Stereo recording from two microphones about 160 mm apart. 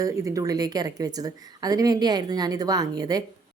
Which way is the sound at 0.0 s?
20° right (ahead or behind).